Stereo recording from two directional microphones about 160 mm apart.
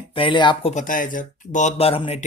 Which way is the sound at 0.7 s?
55° left (ahead or behind).